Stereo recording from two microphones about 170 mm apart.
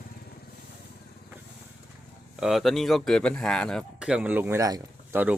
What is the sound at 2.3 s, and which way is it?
Speech, centre (ahead or behind).